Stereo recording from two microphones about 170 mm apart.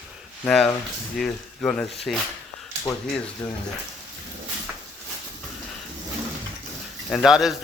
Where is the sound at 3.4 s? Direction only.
20° left (ahead or behind).